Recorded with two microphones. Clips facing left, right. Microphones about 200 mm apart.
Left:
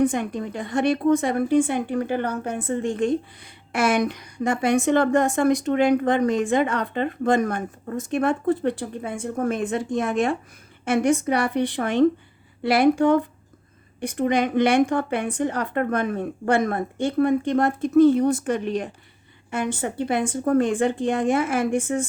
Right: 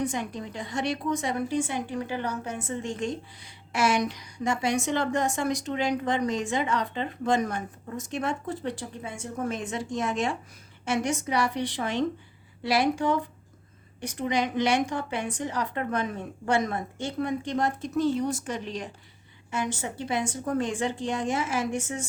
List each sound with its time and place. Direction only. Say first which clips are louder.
0.0 s a woman's voice: left 8 dB; 55° left (ahead or behind)